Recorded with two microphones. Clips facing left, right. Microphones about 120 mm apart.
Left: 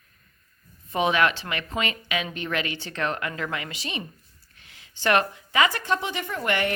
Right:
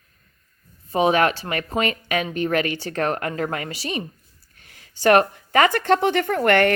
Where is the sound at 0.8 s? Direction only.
35° right (ahead or behind).